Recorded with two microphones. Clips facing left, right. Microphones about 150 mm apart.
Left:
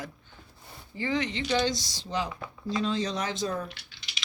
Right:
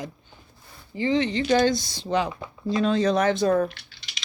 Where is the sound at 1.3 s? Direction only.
45° right (ahead or behind); by 3.7 s 60° right (ahead or behind).